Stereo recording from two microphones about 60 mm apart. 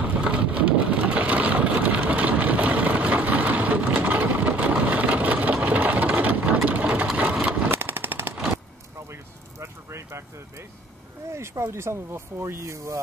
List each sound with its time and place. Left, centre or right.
0.0 s boat: centre
7.7 s machine gun: right
9.1 s a sound: right
11.3 s speech: right